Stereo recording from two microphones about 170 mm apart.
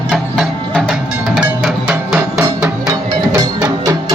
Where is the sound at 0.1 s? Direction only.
5° left (ahead or behind).